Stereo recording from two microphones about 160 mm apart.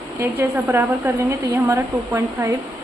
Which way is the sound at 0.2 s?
15° right (ahead or behind).